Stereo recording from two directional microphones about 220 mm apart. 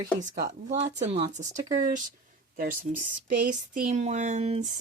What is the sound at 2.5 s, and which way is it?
Speech, 40° right (ahead or behind).